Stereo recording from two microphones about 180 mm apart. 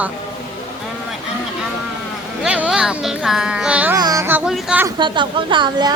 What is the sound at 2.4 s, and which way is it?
Speech, 5° right (ahead or behind).